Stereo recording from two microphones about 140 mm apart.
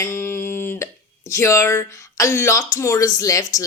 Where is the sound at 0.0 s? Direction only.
15° left (ahead or behind).